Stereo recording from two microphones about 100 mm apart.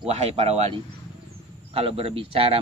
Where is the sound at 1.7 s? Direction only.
70° right (ahead or behind).